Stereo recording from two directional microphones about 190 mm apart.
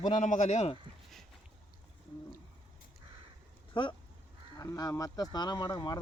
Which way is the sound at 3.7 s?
25° left (ahead or behind).